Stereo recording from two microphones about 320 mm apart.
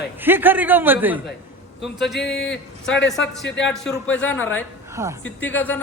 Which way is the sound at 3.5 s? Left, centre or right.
Left.